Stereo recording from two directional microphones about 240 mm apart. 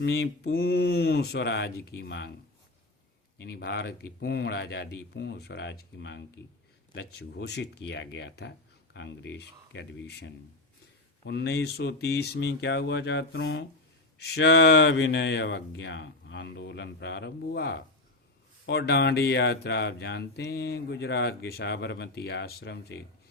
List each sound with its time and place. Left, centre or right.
0.0 s speech: left
3.4 s speech: left